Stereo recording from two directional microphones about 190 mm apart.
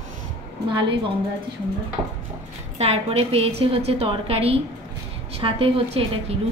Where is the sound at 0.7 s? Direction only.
25° right (ahead or behind).